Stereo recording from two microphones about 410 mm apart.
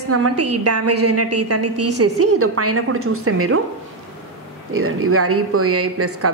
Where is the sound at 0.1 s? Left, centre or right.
Right.